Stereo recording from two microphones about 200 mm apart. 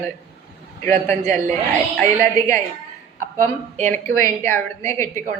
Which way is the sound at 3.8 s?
40° right (ahead or behind).